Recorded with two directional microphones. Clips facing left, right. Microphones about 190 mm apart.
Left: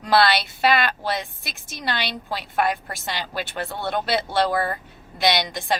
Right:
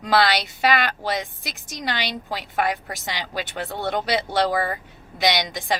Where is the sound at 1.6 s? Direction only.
15° right (ahead or behind).